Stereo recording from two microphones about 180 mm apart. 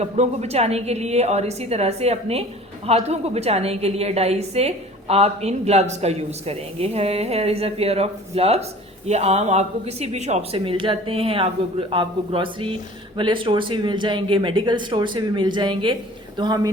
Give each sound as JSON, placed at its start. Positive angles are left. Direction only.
{"t": 0.0, "sound": "a woman's voice", "side_deg": -35}